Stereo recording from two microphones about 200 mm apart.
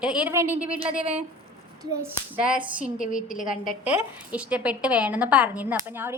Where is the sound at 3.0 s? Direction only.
40° left (ahead or behind).